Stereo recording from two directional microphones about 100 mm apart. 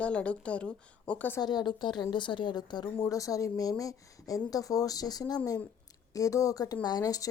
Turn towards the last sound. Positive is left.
turn(degrees=35)  # may be behind; listen again after turning